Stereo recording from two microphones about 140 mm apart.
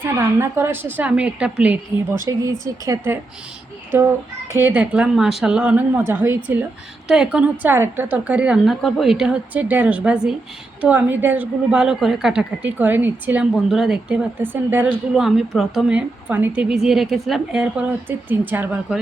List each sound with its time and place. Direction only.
0.0 s a woman's voice: 20° right (ahead or behind)
15.1 s a woman's voice: centre (ahead or behind)